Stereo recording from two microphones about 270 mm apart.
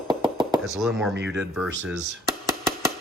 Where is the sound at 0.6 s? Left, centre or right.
Centre.